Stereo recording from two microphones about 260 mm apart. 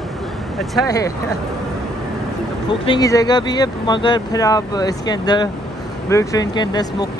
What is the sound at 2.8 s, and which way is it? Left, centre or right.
Speech, centre.